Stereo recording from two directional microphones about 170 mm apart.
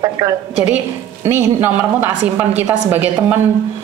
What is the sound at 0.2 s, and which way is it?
A woman's voice, 20° right (ahead or behind).